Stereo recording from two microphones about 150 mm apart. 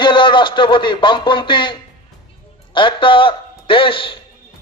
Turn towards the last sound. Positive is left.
turn(degrees=35)  # may be behind; listen again after turning